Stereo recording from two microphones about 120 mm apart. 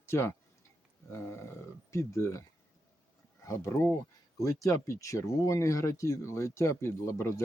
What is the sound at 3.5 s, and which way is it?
Speech, 25° left (ahead or behind).